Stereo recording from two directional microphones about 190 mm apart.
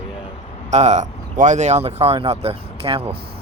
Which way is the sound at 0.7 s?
35° right (ahead or behind).